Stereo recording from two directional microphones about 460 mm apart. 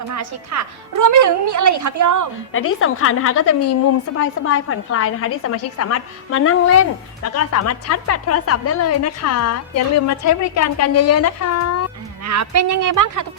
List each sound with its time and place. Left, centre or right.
0.1 s a woman's voice: right
2.5 s a woman's voice: left
12.2 s a woman's voice: right